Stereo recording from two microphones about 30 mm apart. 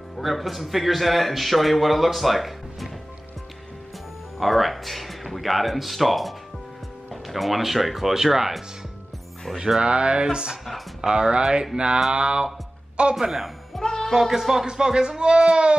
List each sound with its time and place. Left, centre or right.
0.2 s a man's voice: centre
4.4 s a man's voice: centre
8.1 s speech: centre
9.8 s speech: right
13.7 s music: centre
14.1 s speech: centre